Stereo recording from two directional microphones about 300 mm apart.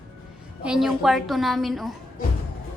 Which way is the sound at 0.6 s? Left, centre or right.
Centre.